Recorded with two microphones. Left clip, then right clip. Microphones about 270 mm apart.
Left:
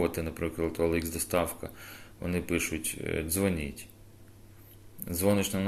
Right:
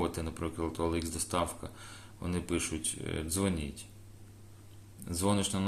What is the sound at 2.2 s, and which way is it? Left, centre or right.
Speech, centre.